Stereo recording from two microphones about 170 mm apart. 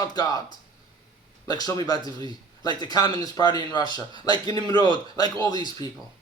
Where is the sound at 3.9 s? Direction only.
30° right (ahead or behind).